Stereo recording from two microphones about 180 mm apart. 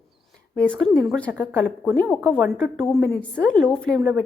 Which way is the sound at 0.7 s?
20° right (ahead or behind).